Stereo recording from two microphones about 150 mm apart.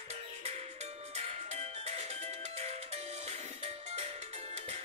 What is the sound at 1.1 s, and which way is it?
Music, 50° right (ahead or behind).